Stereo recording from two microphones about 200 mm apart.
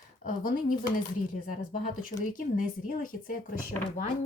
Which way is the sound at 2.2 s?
40° left (ahead or behind).